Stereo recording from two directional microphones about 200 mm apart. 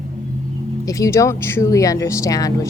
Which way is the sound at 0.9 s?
15° left (ahead or behind).